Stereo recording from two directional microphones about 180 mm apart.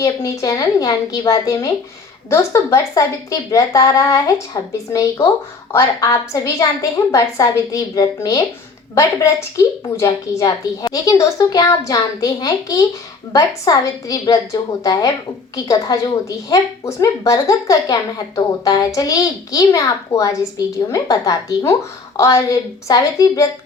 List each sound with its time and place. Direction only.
0.0 s a woman's voice: 20° left (ahead or behind)